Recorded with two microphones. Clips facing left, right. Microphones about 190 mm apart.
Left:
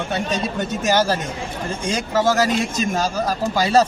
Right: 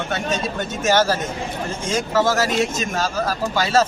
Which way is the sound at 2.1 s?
15° left (ahead or behind).